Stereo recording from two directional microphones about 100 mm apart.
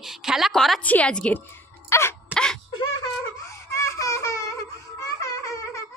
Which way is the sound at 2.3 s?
5° left (ahead or behind).